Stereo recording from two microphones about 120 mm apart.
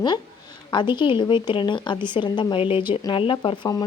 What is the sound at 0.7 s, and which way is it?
Speech, 40° left (ahead or behind).